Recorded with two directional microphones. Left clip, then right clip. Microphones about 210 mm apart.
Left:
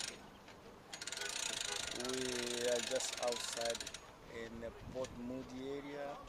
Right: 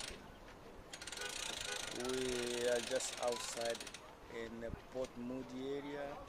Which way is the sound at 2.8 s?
30° left (ahead or behind).